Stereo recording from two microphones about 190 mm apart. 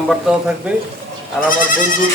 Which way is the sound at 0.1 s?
5° right (ahead or behind).